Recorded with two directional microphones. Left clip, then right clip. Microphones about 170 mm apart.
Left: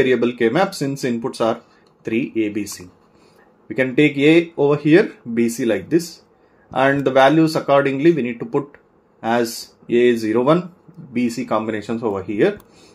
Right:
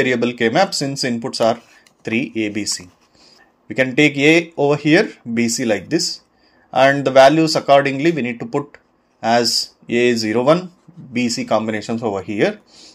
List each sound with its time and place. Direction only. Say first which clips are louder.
0.0 s speech: even; 35° right (ahead or behind)
3.6 s speech: right 2 dB; 35° right (ahead or behind)